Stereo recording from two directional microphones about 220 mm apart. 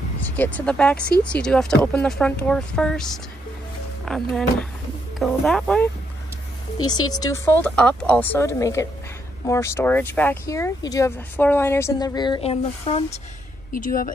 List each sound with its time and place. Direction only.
0.2 s speech: 5° left (ahead or behind)
6.9 s speech: 15° left (ahead or behind)
13.7 s speech: 40° left (ahead or behind)